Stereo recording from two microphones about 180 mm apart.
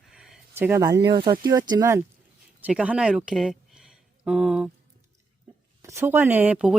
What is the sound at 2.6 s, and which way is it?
Speech, 5° right (ahead or behind).